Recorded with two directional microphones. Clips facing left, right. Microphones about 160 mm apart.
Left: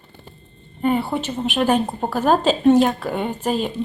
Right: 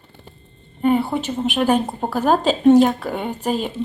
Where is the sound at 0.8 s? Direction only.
10° right (ahead or behind).